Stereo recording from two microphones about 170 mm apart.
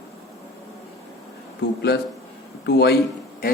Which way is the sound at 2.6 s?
75° left (ahead or behind).